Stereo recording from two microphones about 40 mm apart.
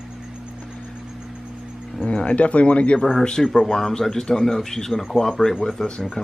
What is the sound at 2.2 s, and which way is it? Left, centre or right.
Speech, left.